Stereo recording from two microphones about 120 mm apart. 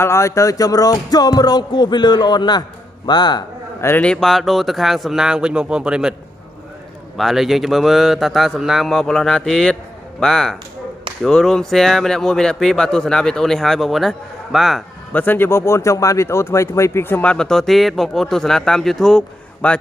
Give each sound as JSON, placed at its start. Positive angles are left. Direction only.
{"t": 0.0, "sound": "music", "side_deg": 25}
{"t": 3.8, "sound": "a man's voice", "side_deg": 15}
{"t": 7.2, "sound": "a man's voice", "side_deg": 0}
{"t": 15.1, "sound": "speech", "side_deg": 15}